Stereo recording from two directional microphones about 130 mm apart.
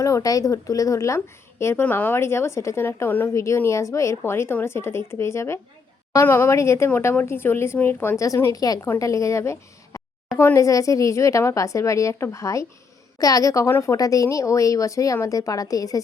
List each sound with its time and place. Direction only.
0.0 s a woman's voice: 25° left (ahead or behind)